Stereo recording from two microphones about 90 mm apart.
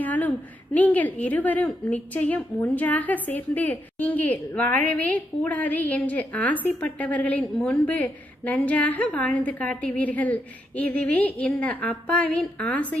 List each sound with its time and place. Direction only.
0.0 s a woman's voice: 20° left (ahead or behind)